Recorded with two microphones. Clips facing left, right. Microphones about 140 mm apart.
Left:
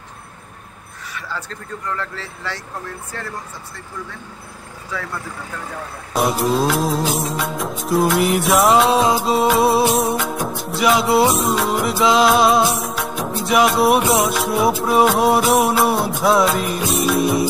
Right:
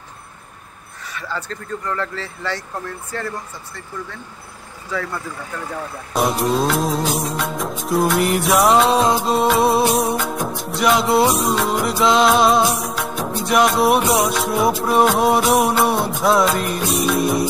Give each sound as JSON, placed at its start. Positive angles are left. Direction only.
{"t": 1.1, "sound": "music of bollywood", "side_deg": 5}
{"t": 6.1, "sound": "music of bollywood", "side_deg": 0}